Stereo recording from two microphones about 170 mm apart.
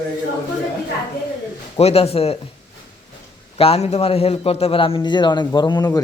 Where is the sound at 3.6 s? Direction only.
40° left (ahead or behind).